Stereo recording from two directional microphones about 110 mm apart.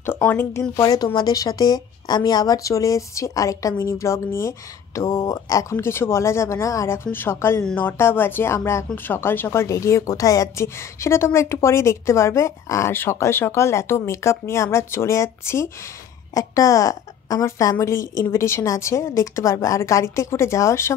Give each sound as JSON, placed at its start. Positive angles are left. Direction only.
{"t": 0.0, "sound": "speech", "side_deg": 20}
{"t": 0.9, "sound": "a woman's voice", "side_deg": 35}